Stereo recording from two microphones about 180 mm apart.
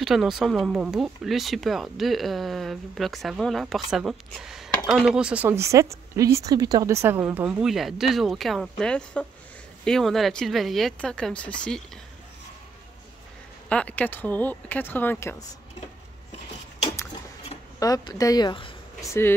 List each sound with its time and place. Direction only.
0.0 s speech: centre (ahead or behind)
13.7 s speech: 5° left (ahead or behind)
17.7 s speech: 20° left (ahead or behind)